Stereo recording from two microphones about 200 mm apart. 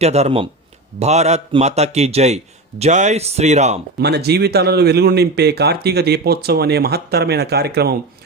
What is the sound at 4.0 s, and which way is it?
Speech, 55° right (ahead or behind).